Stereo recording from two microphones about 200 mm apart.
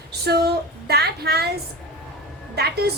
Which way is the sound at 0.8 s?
55° right (ahead or behind).